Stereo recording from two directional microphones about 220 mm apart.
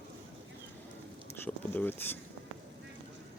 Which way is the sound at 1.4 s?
10° left (ahead or behind).